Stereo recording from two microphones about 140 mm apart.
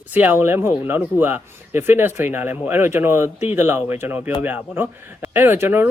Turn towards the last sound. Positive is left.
turn(degrees=-15)  # may be behind; listen again after turning